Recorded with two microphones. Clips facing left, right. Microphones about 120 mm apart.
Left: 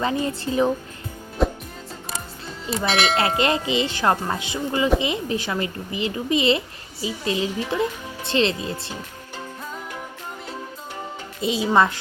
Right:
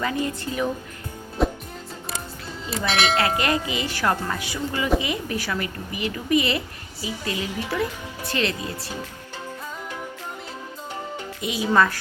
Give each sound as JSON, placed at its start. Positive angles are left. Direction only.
{"t": 0.0, "sound": "speech", "side_deg": 30}
{"t": 1.4, "sound": "music", "side_deg": 0}
{"t": 2.6, "sound": "speech", "side_deg": 0}
{"t": 3.2, "sound": "speech", "side_deg": 25}
{"t": 11.3, "sound": "speech", "side_deg": 30}